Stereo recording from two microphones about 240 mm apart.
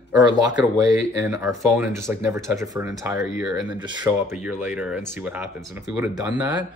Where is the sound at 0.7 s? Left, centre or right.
Centre.